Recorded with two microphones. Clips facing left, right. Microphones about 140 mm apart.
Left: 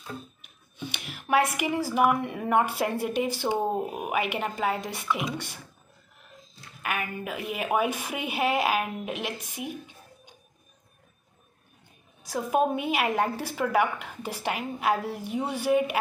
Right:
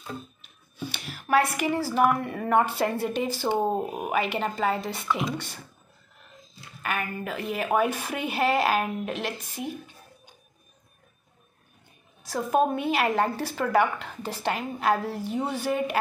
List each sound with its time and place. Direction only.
0.9 s a sound: 15° left (ahead or behind)
2.0 s a woman's voice: 10° left (ahead or behind)
6.8 s a woman's voice: 10° left (ahead or behind)
12.2 s a woman's voice: 10° left (ahead or behind)